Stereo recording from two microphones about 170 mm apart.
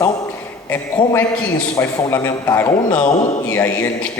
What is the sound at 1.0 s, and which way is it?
A man's voice, 25° left (ahead or behind).